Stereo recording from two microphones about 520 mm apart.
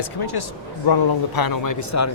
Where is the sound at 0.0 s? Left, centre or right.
Left.